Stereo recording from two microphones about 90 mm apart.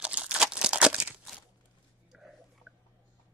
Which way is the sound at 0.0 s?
10° right (ahead or behind).